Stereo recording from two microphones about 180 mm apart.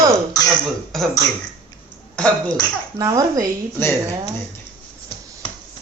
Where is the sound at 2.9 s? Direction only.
20° right (ahead or behind).